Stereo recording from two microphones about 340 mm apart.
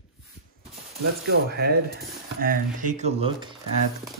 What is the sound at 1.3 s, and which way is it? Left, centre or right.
Speech, right.